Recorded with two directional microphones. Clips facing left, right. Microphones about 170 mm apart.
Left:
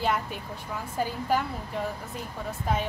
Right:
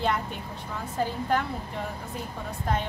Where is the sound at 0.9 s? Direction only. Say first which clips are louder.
Even; 5° left (ahead or behind).